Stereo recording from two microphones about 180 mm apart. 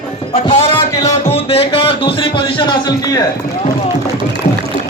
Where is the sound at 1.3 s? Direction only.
35° left (ahead or behind).